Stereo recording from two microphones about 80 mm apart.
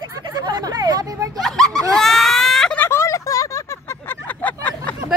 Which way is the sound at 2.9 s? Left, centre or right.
Left.